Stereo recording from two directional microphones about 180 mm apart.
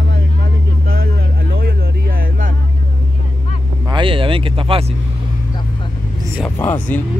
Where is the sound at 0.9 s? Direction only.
60° right (ahead or behind).